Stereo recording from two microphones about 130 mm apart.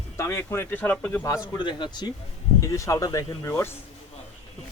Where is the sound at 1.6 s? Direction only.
35° left (ahead or behind).